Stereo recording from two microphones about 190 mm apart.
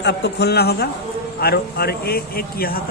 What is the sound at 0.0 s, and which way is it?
A man's voice, 60° left (ahead or behind).